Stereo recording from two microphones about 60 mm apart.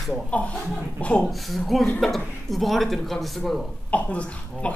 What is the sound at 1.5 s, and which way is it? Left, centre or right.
Speech, centre.